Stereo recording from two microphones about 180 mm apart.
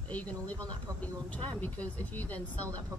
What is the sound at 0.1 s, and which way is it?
Speech, 10° left (ahead or behind).